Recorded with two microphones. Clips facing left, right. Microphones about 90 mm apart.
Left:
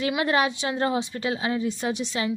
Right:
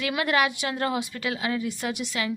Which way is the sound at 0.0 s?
25° left (ahead or behind).